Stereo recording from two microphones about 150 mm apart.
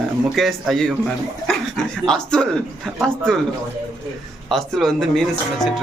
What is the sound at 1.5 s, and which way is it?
Chuckle, centre (ahead or behind).